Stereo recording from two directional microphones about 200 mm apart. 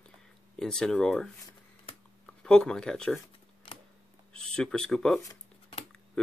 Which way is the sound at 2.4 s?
5° left (ahead or behind).